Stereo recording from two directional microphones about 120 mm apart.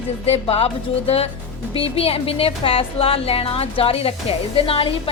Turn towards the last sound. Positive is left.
turn(degrees=50)  # may be behind; listen again after turning